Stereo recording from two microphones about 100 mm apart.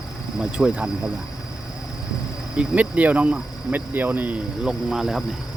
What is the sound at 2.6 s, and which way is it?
Speech, 15° right (ahead or behind).